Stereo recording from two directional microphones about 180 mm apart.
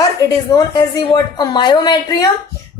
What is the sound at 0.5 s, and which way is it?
A woman's voice, 20° left (ahead or behind).